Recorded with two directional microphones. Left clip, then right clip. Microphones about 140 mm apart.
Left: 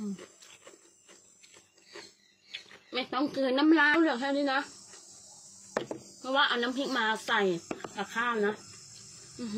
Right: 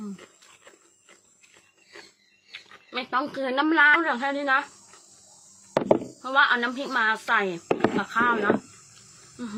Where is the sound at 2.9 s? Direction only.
20° left (ahead or behind).